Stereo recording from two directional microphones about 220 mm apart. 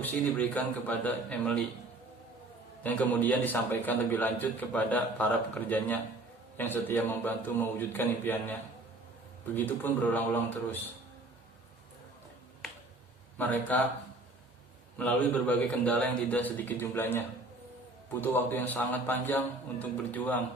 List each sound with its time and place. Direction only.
0.0 s a man's voice: 5° left (ahead or behind)
2.8 s a man's voice: 5° left (ahead or behind)
9.6 s a man's voice: 10° left (ahead or behind)
13.4 s a man's voice: 5° left (ahead or behind)
14.9 s a man's voice: 5° left (ahead or behind)